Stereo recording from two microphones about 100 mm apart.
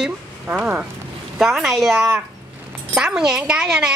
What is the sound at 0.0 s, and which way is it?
Speech, 10° right (ahead or behind).